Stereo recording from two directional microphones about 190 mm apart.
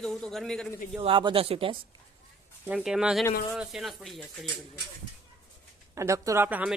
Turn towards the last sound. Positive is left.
turn(degrees=-10)  # may be behind; listen again after turning